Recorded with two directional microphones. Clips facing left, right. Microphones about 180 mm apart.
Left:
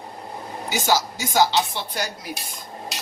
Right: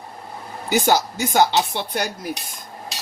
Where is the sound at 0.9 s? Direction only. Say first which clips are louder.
Even; 55° right (ahead or behind).